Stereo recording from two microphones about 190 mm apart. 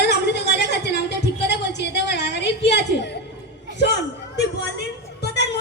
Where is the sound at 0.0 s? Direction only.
60° left (ahead or behind).